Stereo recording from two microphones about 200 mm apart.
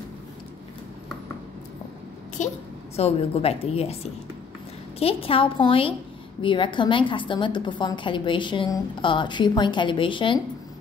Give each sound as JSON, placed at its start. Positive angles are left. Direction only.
{"t": 2.4, "sound": "a woman's voice", "side_deg": 35}
{"t": 4.9, "sound": "a woman's voice", "side_deg": 30}